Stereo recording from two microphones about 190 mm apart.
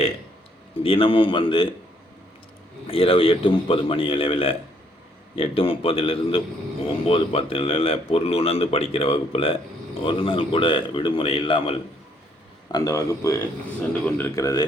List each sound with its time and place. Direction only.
0.8 s a man's voice: 30° left (ahead or behind)
2.8 s a man's voice: 30° left (ahead or behind)
12.7 s speech: 15° left (ahead or behind)